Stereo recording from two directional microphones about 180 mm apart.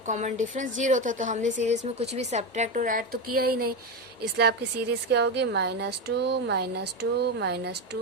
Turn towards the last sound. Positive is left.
turn(degrees=-70)  # may be behind; listen again after turning